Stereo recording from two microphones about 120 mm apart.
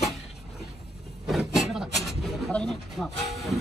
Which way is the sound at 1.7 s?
Centre (ahead or behind).